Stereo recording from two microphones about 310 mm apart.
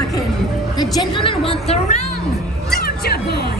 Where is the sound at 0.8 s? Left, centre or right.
Centre.